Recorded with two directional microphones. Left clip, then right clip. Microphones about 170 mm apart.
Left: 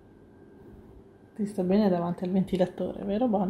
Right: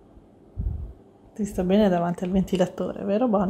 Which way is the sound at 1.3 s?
25° right (ahead or behind).